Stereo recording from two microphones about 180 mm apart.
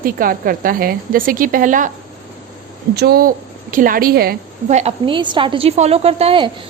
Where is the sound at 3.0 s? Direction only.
60° right (ahead or behind).